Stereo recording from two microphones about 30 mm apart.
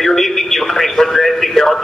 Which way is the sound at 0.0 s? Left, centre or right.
Centre.